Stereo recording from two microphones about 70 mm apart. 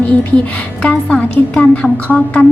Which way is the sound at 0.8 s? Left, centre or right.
Centre.